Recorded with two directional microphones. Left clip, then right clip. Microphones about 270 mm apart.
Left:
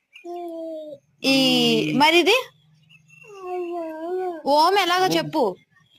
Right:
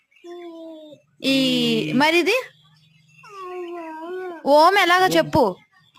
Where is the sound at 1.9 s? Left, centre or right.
Centre.